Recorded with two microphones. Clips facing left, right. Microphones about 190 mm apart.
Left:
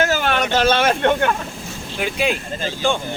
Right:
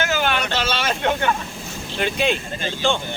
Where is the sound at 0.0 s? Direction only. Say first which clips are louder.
Left 3 dB; 40° left (ahead or behind).